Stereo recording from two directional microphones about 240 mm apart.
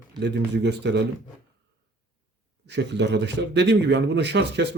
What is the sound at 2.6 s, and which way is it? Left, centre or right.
Speech, right.